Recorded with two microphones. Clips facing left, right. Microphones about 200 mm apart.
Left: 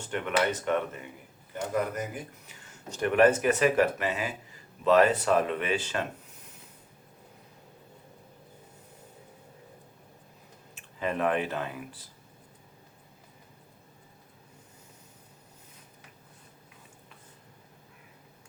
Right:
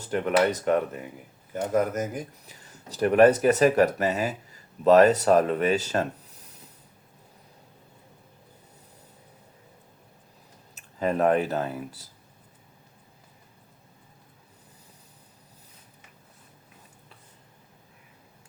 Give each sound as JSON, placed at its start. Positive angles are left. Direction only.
{"t": 0.1, "sound": "speech", "side_deg": -40}
{"t": 10.8, "sound": "speech", "side_deg": -40}